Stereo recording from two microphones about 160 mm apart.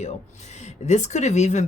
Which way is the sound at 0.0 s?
45° left (ahead or behind).